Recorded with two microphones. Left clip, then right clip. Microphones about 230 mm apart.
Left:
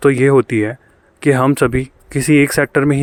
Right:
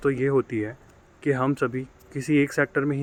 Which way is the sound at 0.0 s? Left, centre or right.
Left.